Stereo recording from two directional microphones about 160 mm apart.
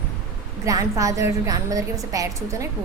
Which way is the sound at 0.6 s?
20° right (ahead or behind).